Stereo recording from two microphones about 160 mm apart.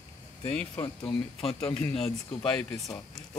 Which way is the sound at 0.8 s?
30° left (ahead or behind).